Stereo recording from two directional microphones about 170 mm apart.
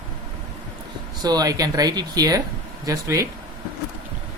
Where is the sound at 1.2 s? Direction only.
20° right (ahead or behind).